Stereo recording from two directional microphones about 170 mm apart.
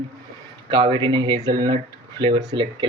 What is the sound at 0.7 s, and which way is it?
Speech, 30° right (ahead or behind).